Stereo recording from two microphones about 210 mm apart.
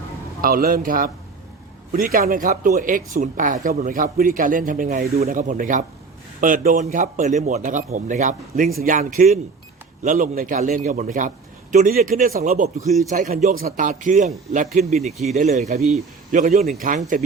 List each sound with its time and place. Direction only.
0.4 s speech: 45° right (ahead or behind)